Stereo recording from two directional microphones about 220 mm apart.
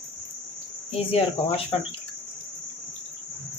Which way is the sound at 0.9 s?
25° left (ahead or behind).